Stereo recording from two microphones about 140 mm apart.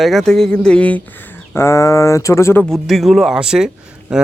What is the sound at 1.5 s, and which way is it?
Speech, 20° left (ahead or behind).